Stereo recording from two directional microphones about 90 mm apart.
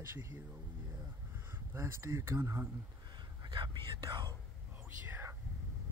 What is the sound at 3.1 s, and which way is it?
Whispering, 60° right (ahead or behind).